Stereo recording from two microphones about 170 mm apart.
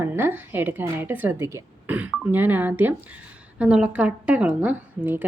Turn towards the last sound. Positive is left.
turn(degrees=-10)  # may be behind; listen again after turning